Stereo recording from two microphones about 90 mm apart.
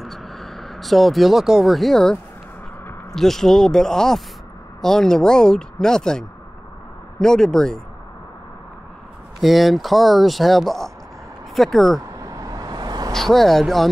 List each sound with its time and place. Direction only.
0.0 s speech: centre (ahead or behind)
3.2 s speech: 5° left (ahead or behind)
9.4 s speech: centre (ahead or behind)
12.2 s vehicle: 40° right (ahead or behind)
13.1 s speech: 5° left (ahead or behind)